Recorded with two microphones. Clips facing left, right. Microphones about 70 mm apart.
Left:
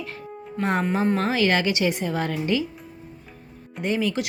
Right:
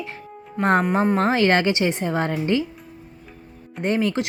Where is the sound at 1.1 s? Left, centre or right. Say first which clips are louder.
Right 3 dB; right.